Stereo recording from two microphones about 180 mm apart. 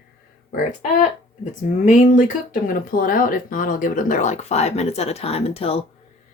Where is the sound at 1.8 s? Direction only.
45° left (ahead or behind).